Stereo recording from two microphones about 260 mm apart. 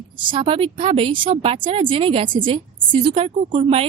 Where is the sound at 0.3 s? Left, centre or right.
Centre.